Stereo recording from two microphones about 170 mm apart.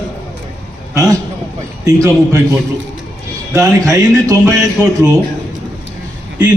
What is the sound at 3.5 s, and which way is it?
Speech, 20° right (ahead or behind).